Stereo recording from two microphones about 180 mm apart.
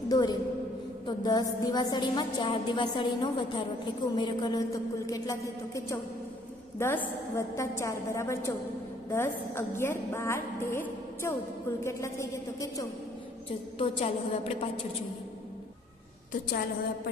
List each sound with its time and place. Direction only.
0.1 s a woman's voice: 25° left (ahead or behind)
6.8 s a woman's voice: 15° left (ahead or behind)
11.8 s a woman's voice: 15° left (ahead or behind)
13.7 s a woman's voice: 35° left (ahead or behind)